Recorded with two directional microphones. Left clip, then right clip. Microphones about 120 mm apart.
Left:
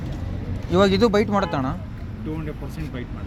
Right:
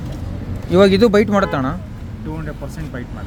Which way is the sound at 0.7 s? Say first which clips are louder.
Right 6 dB; 60° right (ahead or behind).